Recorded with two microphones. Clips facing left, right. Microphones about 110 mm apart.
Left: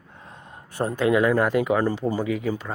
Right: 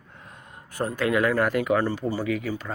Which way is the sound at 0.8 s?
25° left (ahead or behind).